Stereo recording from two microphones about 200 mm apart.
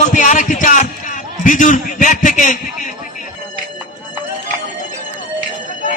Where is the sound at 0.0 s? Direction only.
40° left (ahead or behind).